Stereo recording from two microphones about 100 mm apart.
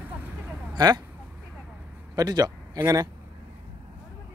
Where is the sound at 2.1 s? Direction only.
40° right (ahead or behind).